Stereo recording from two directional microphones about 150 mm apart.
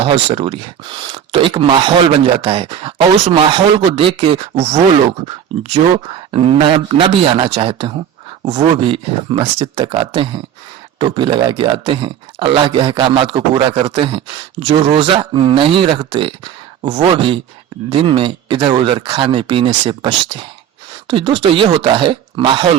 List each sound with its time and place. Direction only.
0.0 s speech: 40° right (ahead or behind)